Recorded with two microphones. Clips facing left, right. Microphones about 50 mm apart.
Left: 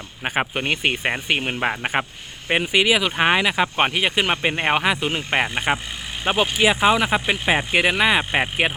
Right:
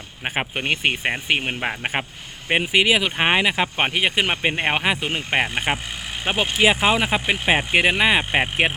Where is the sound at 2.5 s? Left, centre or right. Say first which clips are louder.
Even; right.